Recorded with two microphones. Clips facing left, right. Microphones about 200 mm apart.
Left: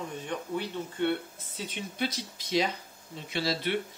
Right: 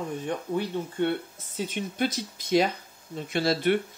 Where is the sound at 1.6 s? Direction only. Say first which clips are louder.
Right 5 dB; 50° right (ahead or behind).